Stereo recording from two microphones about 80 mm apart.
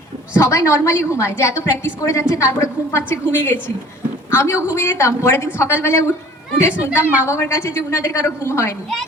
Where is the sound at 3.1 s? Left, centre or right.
Left.